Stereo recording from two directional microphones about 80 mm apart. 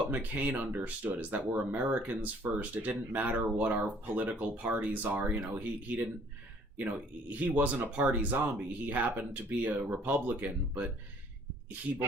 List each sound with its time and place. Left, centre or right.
0.1 s speech: right